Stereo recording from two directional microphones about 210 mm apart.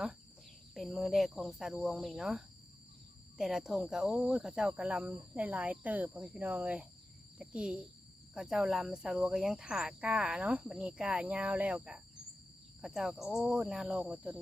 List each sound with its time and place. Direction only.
0.7 s speech: centre (ahead or behind)